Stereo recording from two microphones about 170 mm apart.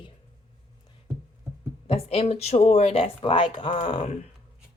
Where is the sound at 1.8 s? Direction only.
35° left (ahead or behind).